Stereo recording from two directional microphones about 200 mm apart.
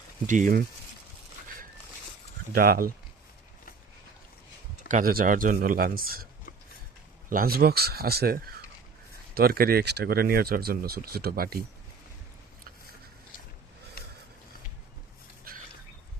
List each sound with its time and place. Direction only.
0.3 s speech: 40° right (ahead or behind)
2.6 s speech: 50° right (ahead or behind)
4.9 s speech: 45° right (ahead or behind)
7.3 s speech: 45° right (ahead or behind)
14.0 s a sound: 50° left (ahead or behind)